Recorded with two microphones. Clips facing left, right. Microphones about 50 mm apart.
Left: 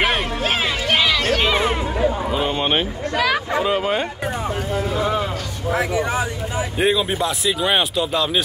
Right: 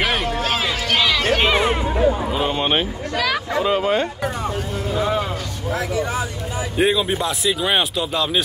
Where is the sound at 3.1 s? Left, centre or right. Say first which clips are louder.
Left 2 dB; centre.